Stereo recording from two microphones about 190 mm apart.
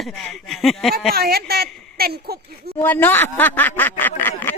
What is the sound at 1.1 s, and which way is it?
A woman's voice, 55° right (ahead or behind).